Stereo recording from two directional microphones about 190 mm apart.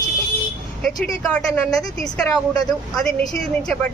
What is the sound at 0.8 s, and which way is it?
Speech, 5° left (ahead or behind).